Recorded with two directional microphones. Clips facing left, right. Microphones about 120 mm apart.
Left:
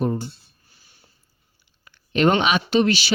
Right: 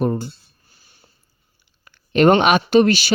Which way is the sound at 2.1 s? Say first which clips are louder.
Right 5 dB; 50° right (ahead or behind).